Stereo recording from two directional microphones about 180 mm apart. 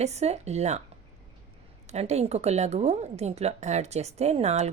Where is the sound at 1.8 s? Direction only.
35° right (ahead or behind).